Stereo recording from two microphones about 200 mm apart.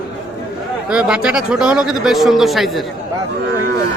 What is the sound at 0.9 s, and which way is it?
Speech, 5° right (ahead or behind).